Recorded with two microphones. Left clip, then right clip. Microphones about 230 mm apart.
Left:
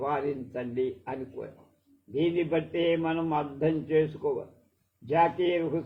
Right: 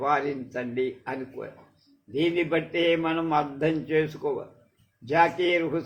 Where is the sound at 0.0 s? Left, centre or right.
Right.